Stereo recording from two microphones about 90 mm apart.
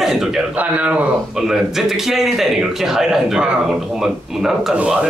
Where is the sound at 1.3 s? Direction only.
5° right (ahead or behind).